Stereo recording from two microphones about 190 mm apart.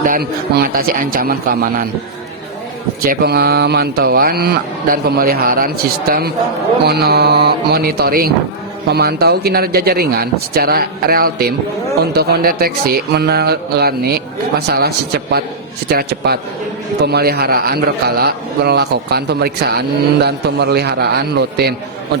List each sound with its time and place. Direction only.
0.0 s speech: 50° right (ahead or behind)
3.0 s a man's voice: 55° right (ahead or behind)